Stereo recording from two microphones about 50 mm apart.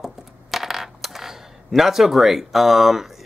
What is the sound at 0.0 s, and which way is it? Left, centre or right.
Coin, centre.